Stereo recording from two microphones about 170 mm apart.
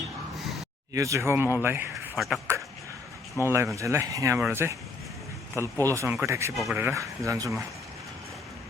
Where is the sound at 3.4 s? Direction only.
15° right (ahead or behind).